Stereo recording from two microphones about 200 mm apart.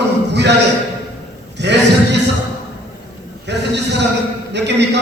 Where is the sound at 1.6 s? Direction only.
60° right (ahead or behind).